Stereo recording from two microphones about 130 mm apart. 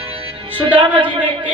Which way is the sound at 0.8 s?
40° right (ahead or behind).